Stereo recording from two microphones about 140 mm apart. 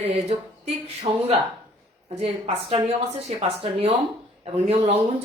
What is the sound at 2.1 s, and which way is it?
Speech, 50° right (ahead or behind).